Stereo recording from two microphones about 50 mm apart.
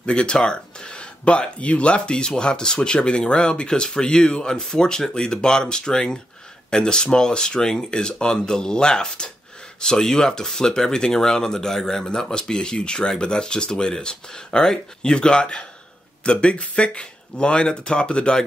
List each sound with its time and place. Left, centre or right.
0.0 s speech: centre